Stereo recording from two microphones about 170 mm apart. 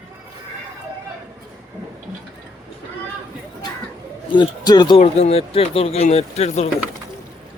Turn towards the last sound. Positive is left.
turn(degrees=40)  # may be behind; listen again after turning